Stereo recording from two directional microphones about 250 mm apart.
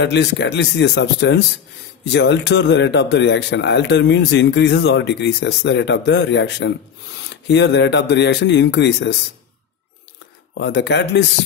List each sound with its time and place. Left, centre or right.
0.0 s speech: left
10.6 s speech: left